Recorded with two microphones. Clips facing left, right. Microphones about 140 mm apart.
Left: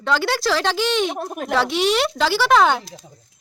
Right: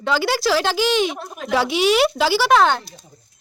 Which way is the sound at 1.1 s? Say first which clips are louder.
Left 4 dB; 45° left (ahead or behind).